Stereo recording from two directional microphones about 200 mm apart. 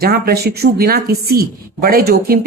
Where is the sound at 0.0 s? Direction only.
50° right (ahead or behind).